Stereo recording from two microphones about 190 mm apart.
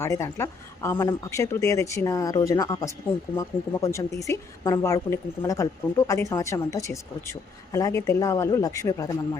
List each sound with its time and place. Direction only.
0.0 s speech: 15° left (ahead or behind)